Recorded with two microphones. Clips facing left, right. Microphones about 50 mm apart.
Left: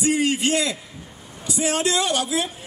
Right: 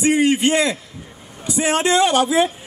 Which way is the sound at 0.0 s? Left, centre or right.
Right.